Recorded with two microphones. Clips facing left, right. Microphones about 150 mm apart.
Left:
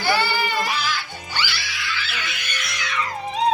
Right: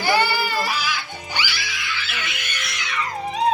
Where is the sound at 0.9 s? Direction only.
15° right (ahead or behind).